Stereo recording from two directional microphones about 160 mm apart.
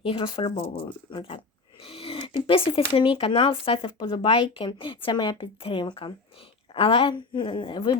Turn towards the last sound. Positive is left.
turn(degrees=30)  # may be behind; listen again after turning